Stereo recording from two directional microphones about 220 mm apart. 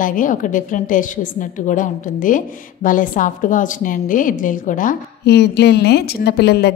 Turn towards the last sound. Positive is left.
turn(degrees=45)  # may be behind; listen again after turning